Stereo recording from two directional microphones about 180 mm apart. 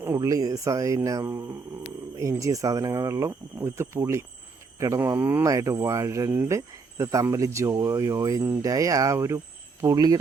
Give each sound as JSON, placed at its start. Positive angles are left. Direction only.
{"t": 0.0, "sound": "speech", "side_deg": -15}